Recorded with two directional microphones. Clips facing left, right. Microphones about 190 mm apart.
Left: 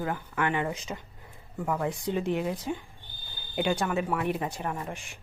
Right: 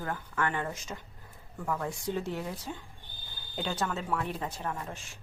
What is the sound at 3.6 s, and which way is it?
A woman's voice, 15° left (ahead or behind).